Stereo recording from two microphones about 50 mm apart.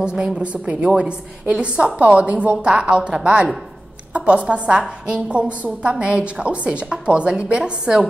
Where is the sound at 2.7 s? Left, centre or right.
Centre.